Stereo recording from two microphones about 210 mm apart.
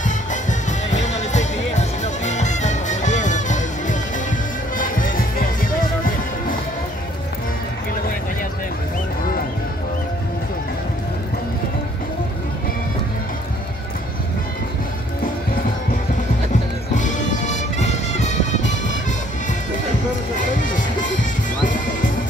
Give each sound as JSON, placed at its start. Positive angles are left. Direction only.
{"t": 0.0, "sound": "music", "side_deg": 35}
{"t": 16.9, "sound": "music", "side_deg": 35}
{"t": 20.5, "sound": "music", "side_deg": 40}